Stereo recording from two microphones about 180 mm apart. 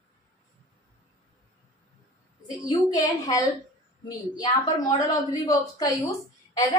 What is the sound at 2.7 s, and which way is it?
Speech, 20° left (ahead or behind).